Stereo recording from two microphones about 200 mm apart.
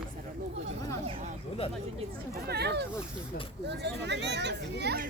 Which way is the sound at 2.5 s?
55° right (ahead or behind).